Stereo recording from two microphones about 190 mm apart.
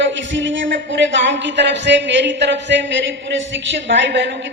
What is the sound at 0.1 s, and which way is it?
A woman's voice, 75° right (ahead or behind).